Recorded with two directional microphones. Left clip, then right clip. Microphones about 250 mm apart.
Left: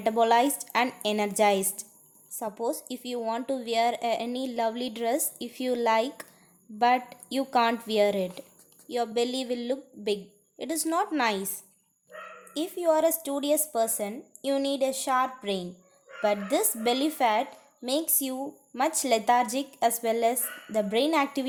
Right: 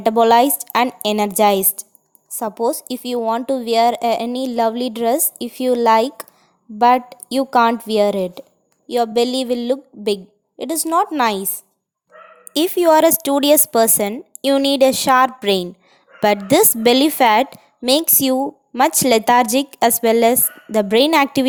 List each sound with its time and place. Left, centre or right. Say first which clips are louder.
0.0 s a woman's voice: right 10 dB; right